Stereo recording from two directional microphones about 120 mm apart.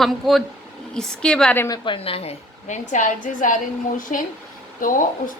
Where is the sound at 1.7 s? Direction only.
45° left (ahead or behind).